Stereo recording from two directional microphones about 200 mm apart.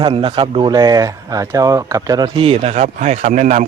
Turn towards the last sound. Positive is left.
turn(degrees=-40)  # may be behind; listen again after turning